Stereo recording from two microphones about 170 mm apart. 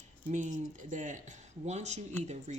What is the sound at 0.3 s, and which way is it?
Speech, 45° right (ahead or behind).